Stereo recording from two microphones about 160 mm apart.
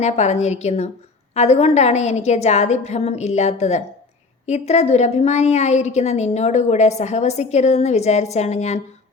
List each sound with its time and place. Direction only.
0.0 s a woman's voice: 45° left (ahead or behind)